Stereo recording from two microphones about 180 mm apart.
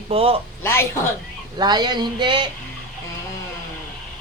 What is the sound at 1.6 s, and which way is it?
Speech, 25° right (ahead or behind).